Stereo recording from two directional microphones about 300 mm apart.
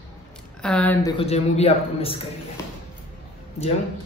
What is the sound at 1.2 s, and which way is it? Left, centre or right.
A man's voice, left.